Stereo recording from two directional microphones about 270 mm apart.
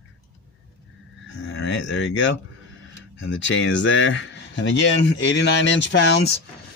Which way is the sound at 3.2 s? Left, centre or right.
Left.